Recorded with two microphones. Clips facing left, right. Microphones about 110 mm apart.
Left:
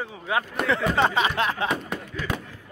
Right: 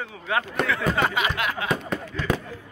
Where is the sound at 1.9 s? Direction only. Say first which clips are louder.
Right 2 dB; 10° left (ahead or behind).